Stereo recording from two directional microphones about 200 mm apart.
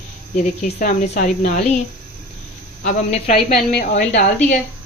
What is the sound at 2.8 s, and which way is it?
Speech, 40° left (ahead or behind).